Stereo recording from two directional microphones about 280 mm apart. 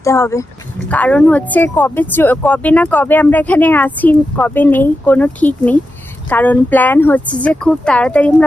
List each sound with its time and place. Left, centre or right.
0.0 s speech: centre